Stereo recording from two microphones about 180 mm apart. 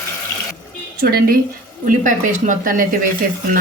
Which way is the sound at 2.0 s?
45° right (ahead or behind).